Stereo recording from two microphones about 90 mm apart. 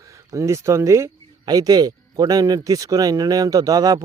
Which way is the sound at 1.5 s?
50° right (ahead or behind).